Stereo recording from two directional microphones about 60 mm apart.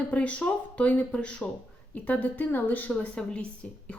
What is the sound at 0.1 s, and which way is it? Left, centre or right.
Speech, left.